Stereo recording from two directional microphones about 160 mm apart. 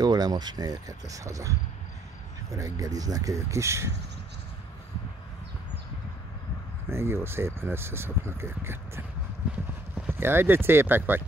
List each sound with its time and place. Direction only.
0.0 s speech: 25° right (ahead or behind)
6.9 s speech: 15° right (ahead or behind)
10.0 s speech: 15° right (ahead or behind)